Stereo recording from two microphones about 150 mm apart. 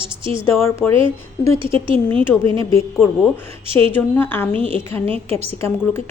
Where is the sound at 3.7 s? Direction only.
40° right (ahead or behind).